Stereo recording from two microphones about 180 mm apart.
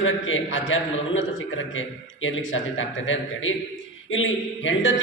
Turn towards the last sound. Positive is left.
turn(degrees=90)